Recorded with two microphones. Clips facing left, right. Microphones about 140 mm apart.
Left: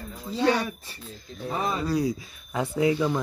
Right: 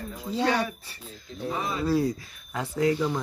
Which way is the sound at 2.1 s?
15° left (ahead or behind).